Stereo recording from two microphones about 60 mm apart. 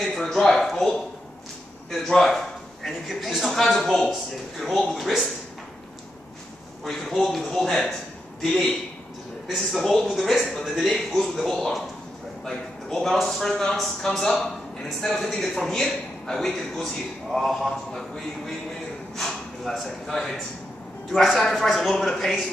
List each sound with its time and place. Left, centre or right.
0.0 s a man's voice: centre
6.8 s a man's voice: centre
9.5 s a man's voice: centre